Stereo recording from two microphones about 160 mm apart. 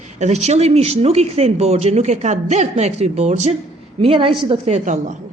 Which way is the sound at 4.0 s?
35° right (ahead or behind).